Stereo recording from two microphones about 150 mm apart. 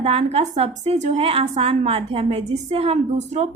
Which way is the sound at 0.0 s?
40° right (ahead or behind).